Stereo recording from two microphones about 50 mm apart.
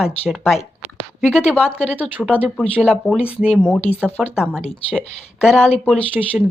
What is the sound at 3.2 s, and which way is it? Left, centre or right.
Speech, right.